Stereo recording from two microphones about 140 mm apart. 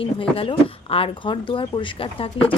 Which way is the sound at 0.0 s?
40° left (ahead or behind).